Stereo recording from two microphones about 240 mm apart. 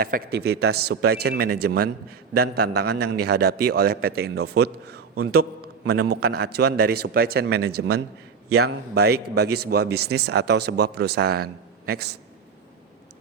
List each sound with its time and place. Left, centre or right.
0.0 s a man's voice: right
5.1 s a man's voice: right
6.2 s a man's voice: right